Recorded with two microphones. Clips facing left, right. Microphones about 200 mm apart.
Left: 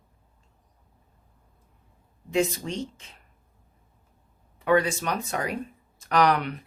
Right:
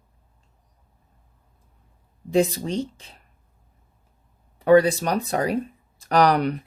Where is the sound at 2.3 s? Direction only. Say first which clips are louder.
Right 5 dB; 35° right (ahead or behind).